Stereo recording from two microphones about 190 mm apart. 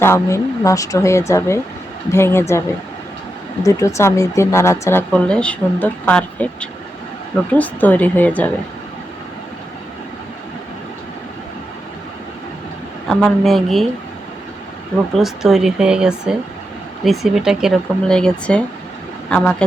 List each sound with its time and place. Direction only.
0.0 s speech: 15° left (ahead or behind)
13.1 s speech: 5° left (ahead or behind)
15.1 s speech: centre (ahead or behind)